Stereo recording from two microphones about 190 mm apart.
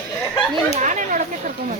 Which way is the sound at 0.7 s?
40° right (ahead or behind).